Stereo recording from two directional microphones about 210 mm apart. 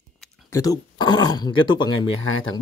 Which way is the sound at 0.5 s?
15° left (ahead or behind).